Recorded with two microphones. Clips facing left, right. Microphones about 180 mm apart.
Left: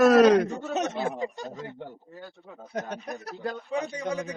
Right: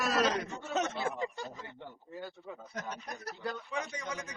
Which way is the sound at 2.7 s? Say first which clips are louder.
Left 10 dB; 60° left (ahead or behind).